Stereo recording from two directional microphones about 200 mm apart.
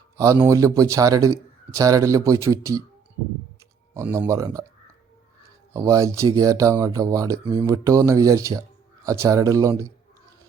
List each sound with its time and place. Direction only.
0.2 s speech: 15° right (ahead or behind)
3.9 s speech: 15° right (ahead or behind)
5.7 s speech: 15° right (ahead or behind)